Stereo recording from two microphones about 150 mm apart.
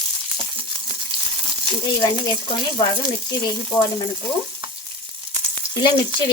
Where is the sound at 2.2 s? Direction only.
30° left (ahead or behind).